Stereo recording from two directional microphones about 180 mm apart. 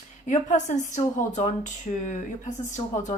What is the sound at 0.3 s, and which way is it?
Speech, 45° left (ahead or behind).